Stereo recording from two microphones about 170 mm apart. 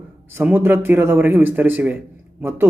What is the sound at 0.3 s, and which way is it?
A man's voice, 10° right (ahead or behind).